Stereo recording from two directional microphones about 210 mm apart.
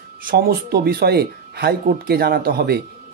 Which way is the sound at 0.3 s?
45° right (ahead or behind).